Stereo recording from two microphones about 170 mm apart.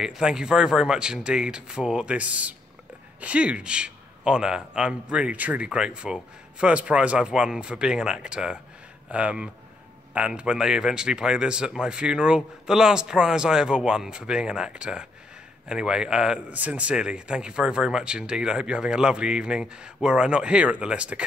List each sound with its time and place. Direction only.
0.0 s speech: 5° right (ahead or behind)